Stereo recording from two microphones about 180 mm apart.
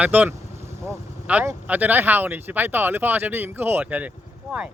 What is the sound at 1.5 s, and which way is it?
Speech, 10° right (ahead or behind).